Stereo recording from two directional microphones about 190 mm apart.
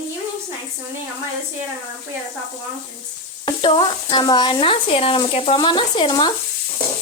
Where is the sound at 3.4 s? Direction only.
25° left (ahead or behind).